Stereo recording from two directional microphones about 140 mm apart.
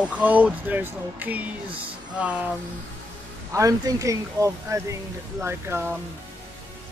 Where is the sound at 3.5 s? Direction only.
25° right (ahead or behind).